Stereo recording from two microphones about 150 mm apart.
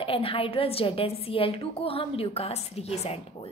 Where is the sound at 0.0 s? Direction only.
35° left (ahead or behind).